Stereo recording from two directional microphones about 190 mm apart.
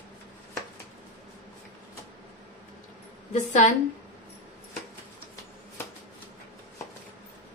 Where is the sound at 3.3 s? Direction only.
40° left (ahead or behind).